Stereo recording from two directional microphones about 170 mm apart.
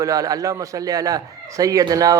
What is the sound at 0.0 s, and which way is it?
A man's voice, 20° right (ahead or behind).